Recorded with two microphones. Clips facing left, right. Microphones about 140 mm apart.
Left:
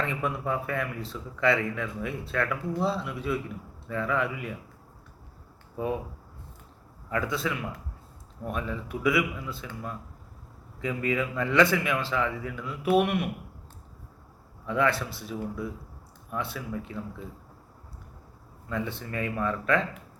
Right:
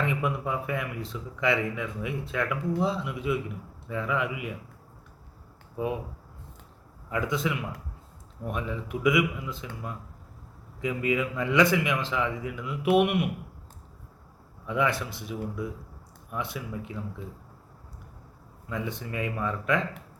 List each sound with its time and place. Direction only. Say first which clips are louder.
0.0 s speech: right 1 dB; 10° right (ahead or behind)
7.1 s speech: right 1 dB; 15° right (ahead or behind)
14.7 s speech: left 1 dB; 15° right (ahead or behind)
18.7 s speech: left 1 dB; 15° right (ahead or behind)